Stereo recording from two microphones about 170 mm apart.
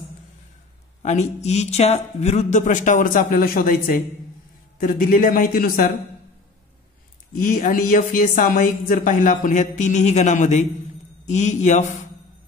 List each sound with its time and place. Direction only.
1.0 s a man's voice: 40° left (ahead or behind)
7.4 s speech: 50° left (ahead or behind)